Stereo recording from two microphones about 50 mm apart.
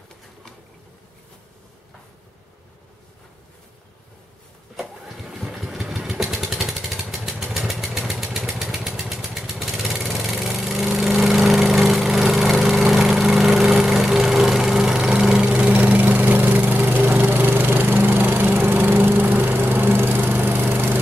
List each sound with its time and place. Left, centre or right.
4.7 s engine starting: centre
6.4 s vehicle: centre
11.0 s lawn mower: centre; by 15.8 s right
15.8 s lawn mower: right